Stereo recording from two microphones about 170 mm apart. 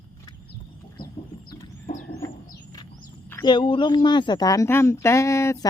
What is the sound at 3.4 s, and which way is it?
Speech, 30° left (ahead or behind).